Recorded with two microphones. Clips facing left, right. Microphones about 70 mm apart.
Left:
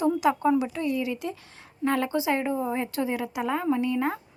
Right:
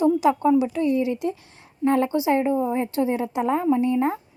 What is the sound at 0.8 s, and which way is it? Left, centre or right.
A woman's voice, right.